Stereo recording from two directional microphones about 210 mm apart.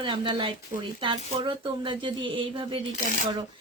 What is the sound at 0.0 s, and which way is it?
A woman's voice, 25° right (ahead or behind).